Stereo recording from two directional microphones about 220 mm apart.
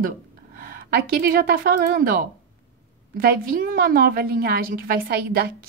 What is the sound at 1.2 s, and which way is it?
A woman's voice, 40° right (ahead or behind).